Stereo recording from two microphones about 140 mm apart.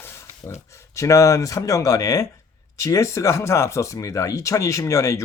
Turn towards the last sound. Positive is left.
turn(degrees=20)  # may be behind; listen again after turning